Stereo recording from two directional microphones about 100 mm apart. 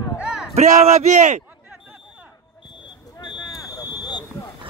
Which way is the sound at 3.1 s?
50° left (ahead or behind).